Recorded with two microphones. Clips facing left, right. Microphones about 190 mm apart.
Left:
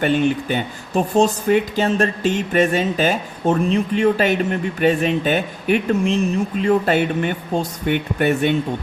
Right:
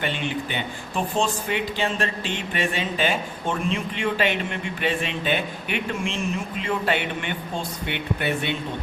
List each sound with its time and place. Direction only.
0.0 s speech: 45° left (ahead or behind)